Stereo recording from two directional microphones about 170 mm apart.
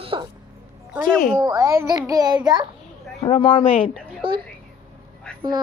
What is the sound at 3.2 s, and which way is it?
Speech, 30° left (ahead or behind).